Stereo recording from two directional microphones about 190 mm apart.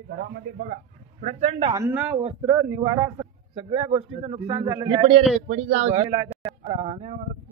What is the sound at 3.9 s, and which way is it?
A man's voice, 30° right (ahead or behind).